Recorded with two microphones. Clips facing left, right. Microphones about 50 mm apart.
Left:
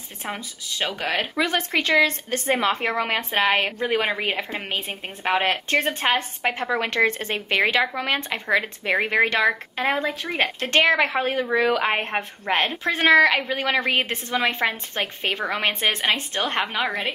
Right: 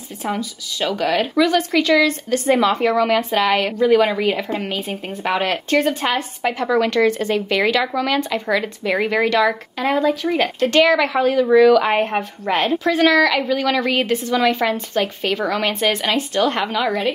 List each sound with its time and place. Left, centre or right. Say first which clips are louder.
0.2 s a woman's voice: right 7 dB; left